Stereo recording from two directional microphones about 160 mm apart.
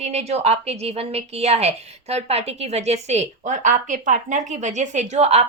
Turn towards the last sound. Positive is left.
turn(degrees=-40)  # may be behind; listen again after turning